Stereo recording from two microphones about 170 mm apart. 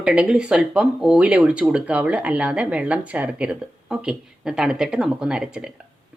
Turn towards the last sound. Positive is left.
turn(degrees=-5)  # may be behind; listen again after turning